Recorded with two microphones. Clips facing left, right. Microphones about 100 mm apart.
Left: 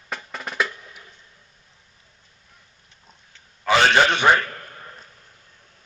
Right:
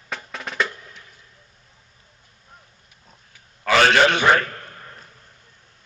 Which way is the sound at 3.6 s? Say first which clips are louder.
Right 1 dB; 25° left (ahead or behind).